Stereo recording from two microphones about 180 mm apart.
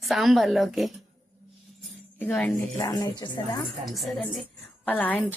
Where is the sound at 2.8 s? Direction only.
20° left (ahead or behind).